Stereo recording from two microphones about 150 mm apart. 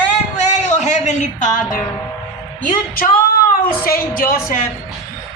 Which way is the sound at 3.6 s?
70° left (ahead or behind).